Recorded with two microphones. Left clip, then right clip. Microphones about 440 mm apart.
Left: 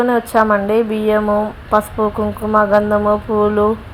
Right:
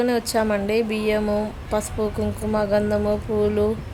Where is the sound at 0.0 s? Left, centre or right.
Right.